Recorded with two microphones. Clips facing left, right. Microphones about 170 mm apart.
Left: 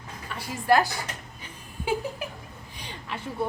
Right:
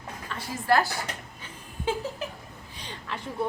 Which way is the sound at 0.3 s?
15° left (ahead or behind).